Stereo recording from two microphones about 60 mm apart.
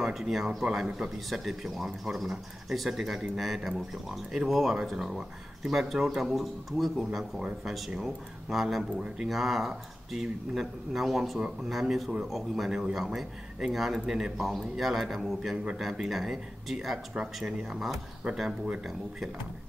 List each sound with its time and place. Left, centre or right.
0.0 s speech: centre
8.9 s speech: centre
15.5 s speech: centre
15.8 s speech: centre